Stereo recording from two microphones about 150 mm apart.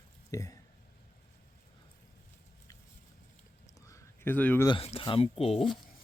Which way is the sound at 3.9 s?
10° left (ahead or behind).